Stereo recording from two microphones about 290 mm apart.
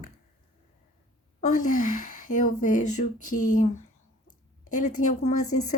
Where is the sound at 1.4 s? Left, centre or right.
Left.